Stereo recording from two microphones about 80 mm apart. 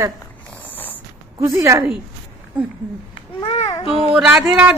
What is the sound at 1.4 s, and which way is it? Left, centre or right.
Speech, right.